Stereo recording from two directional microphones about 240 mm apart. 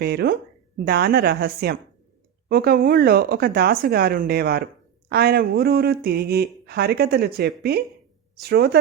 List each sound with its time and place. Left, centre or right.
0.0 s speech: right